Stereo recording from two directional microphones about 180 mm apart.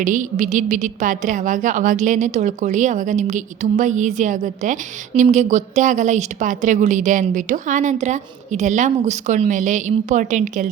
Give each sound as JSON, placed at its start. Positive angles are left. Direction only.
{"t": 0.0, "sound": "a woman's voice", "side_deg": -45}